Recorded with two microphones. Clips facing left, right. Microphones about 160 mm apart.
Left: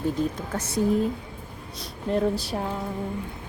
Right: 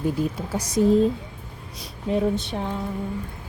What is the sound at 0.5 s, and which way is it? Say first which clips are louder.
Speech: right 2 dB; 10° right (ahead or behind).